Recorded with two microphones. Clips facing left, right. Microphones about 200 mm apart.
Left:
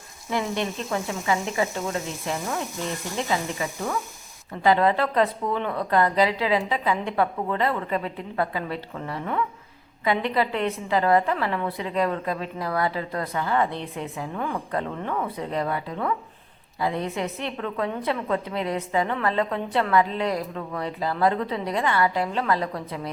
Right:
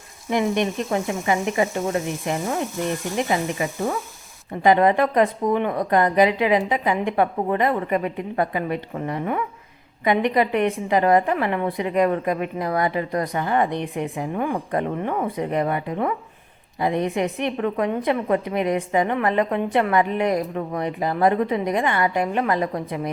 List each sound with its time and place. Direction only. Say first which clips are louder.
0.3 s a woman's voice: right 5 dB; 20° right (ahead or behind)
3.2 s sizzle: right 3 dB; 20° right (ahead or behind)
4.6 s a woman's voice: right 4 dB; 15° right (ahead or behind)
20.7 s sizzle: right 3 dB; 20° right (ahead or behind)
21.5 s a woman's voice: right 3 dB; 15° right (ahead or behind)